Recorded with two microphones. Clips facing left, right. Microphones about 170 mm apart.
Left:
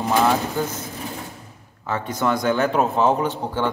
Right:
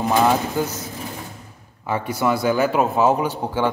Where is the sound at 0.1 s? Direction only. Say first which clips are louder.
Right 1 dB; 15° right (ahead or behind).